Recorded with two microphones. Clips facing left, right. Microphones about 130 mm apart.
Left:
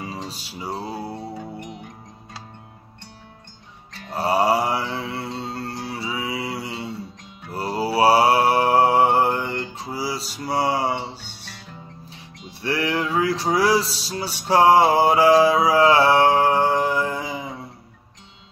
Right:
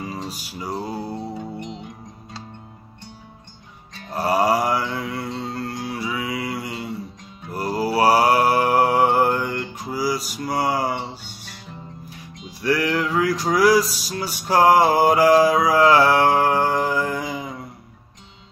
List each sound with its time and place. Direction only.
0.0 s music: 30° left (ahead or behind)
1.6 s music: 25° right (ahead or behind)
4.1 s mantra: 25° left (ahead or behind)
11.1 s music: centre (ahead or behind)
12.6 s music: 25° left (ahead or behind)